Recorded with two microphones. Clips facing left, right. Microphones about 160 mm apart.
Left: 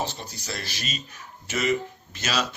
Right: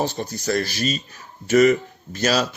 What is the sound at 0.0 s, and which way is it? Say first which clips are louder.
Speech: right 8 dB; 45° right (ahead or behind).